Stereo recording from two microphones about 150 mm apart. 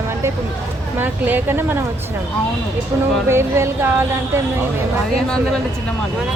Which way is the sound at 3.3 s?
15° right (ahead or behind).